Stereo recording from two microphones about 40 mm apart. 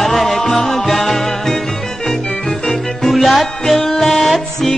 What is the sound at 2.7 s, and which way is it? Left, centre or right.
Music, centre.